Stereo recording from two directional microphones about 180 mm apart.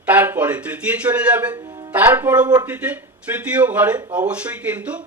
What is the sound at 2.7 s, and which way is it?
Speech, 10° right (ahead or behind).